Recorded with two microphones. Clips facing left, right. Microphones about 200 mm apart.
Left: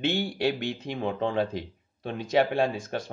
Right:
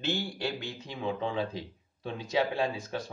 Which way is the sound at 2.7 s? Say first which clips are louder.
Left 4 dB; 50° left (ahead or behind).